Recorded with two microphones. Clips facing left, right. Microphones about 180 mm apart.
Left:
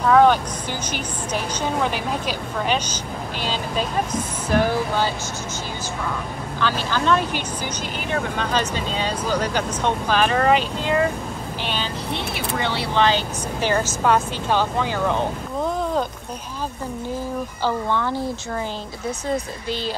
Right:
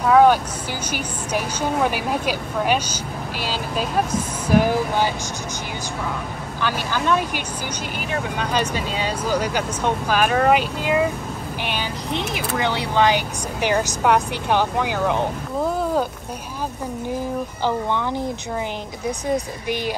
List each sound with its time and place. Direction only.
0.0 s speech: 10° right (ahead or behind)
6.6 s speech: 10° right (ahead or behind)
17.6 s speech: 15° right (ahead or behind)